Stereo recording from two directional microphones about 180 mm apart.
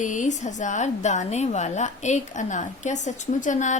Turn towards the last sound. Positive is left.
turn(degrees=45)  # may be behind; listen again after turning